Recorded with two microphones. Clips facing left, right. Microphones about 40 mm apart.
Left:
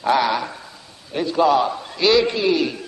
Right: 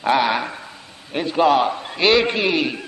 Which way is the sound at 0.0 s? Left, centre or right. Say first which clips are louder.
Even; right.